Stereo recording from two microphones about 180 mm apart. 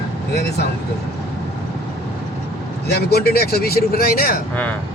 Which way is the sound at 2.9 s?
60° left (ahead or behind).